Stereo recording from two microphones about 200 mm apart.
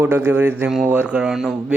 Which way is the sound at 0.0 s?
10° right (ahead or behind).